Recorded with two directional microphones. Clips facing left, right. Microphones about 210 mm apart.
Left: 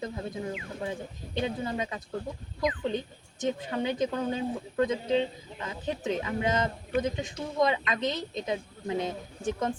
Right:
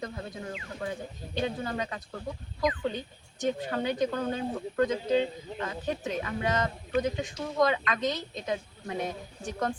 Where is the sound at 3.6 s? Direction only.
20° left (ahead or behind).